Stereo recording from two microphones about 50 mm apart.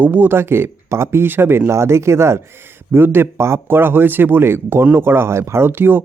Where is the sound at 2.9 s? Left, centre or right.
Right.